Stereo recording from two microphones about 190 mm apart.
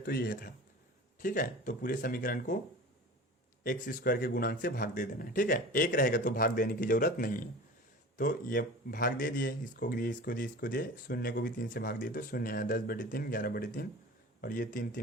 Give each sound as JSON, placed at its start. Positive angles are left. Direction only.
{"t": 0.0, "sound": "speech", "side_deg": 50}
{"t": 3.6, "sound": "speech", "side_deg": 50}